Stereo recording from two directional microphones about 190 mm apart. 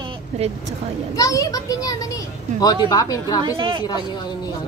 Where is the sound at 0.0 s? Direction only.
35° right (ahead or behind).